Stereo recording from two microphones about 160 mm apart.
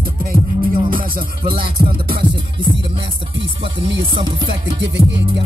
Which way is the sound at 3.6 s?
30° right (ahead or behind).